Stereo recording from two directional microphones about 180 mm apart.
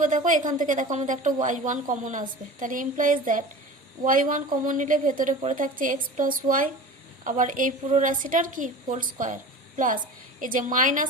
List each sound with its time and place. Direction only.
0.3 s a woman's voice: 45° right (ahead or behind)